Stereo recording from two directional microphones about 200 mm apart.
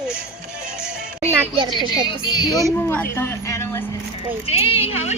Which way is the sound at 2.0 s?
20° left (ahead or behind).